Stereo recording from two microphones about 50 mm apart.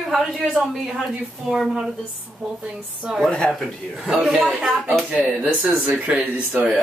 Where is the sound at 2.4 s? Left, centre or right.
Centre.